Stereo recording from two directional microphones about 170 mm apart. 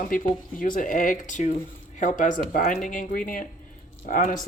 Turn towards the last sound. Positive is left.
turn(degrees=50)  # may be behind; listen again after turning